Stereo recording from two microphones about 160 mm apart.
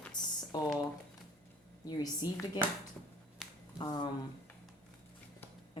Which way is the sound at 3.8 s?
25° left (ahead or behind).